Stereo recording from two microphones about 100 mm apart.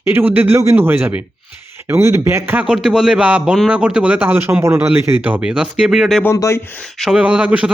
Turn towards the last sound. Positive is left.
turn(degrees=-15)  # may be behind; listen again after turning